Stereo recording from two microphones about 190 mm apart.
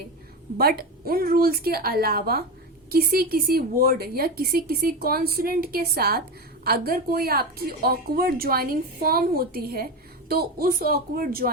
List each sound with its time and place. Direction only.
0.5 s a woman's voice: 50° right (ahead or behind)